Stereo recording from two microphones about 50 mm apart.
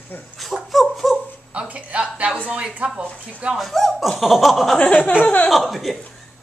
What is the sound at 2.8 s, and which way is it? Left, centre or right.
Speech, centre.